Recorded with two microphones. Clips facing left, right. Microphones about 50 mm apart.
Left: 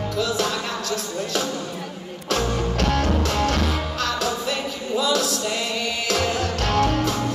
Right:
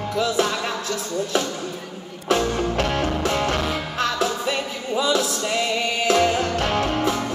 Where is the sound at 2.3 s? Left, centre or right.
Centre.